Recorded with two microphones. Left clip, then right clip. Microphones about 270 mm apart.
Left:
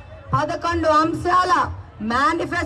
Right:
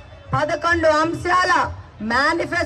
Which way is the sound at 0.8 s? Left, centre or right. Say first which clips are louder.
Even; centre.